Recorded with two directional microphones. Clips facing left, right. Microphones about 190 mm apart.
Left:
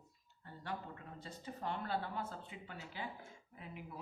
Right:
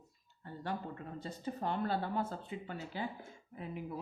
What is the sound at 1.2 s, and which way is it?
A woman's voice, 40° right (ahead or behind).